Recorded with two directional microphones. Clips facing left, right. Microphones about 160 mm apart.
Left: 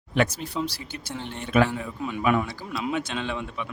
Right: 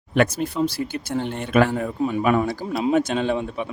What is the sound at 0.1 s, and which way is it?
Speech, 50° right (ahead or behind).